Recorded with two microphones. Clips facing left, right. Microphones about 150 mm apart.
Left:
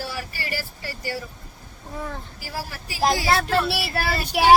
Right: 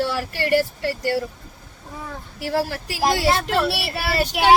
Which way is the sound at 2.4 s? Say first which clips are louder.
Right 14 dB; 70° right (ahead or behind).